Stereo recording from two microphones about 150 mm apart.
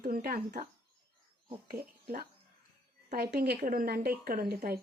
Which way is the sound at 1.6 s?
70° right (ahead or behind).